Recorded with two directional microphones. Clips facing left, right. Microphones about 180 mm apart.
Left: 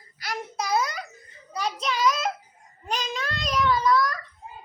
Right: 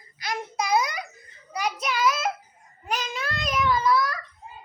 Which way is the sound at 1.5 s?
10° right (ahead or behind).